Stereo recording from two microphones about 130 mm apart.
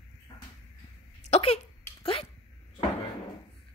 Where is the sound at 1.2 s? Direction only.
55° left (ahead or behind).